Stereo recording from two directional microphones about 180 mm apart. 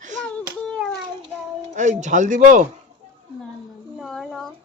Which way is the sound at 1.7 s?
40° right (ahead or behind).